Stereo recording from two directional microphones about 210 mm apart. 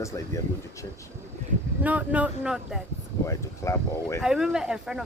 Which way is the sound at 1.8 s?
5° right (ahead or behind).